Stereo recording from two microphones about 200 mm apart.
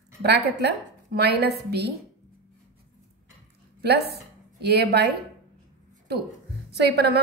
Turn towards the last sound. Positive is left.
turn(degrees=-55)  # may be behind; listen again after turning